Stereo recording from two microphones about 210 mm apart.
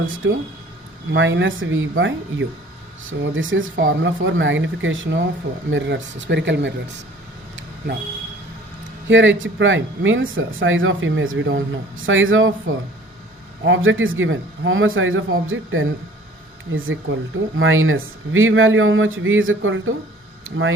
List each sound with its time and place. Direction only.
0.0 s speech: 70° right (ahead or behind)
9.0 s speech: 65° right (ahead or behind)